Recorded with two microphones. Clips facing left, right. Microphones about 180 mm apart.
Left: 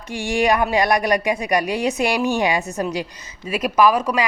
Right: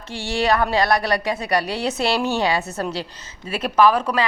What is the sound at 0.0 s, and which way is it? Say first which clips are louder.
Speech: left 3 dB; 15° left (ahead or behind).